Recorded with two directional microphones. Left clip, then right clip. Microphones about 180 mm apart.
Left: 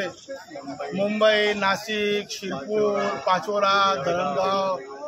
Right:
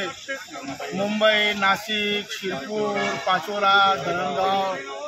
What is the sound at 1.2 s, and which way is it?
Speech, 25° left (ahead or behind).